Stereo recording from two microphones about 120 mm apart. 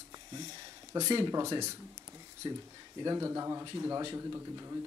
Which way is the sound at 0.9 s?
30° right (ahead or behind).